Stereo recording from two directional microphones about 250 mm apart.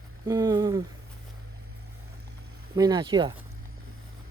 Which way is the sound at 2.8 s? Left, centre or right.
Centre.